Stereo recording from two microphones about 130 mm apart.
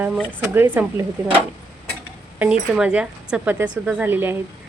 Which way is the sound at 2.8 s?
5° right (ahead or behind).